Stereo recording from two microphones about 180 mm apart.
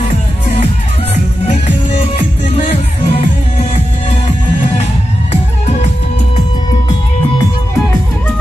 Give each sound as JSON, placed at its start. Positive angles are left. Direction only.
{"t": 2.5, "sound": "music", "side_deg": 35}